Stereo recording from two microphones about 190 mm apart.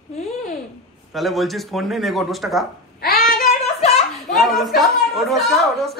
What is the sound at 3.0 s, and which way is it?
Child singing, 50° left (ahead or behind).